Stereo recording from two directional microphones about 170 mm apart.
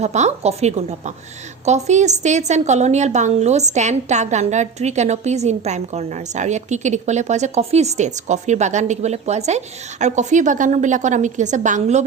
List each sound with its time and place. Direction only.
0.0 s a woman's voice: 40° right (ahead or behind)